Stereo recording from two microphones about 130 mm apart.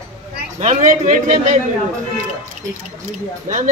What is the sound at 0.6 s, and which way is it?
A man's voice, 65° right (ahead or behind).